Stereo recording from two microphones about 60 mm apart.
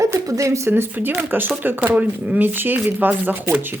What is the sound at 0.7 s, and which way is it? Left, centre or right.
Speech, right.